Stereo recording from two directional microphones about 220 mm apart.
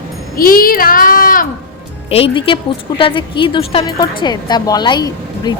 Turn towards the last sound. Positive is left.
turn(degrees=20)  # may be behind; listen again after turning